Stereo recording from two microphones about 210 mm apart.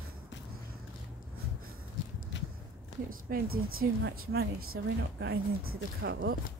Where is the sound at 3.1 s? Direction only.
45° right (ahead or behind).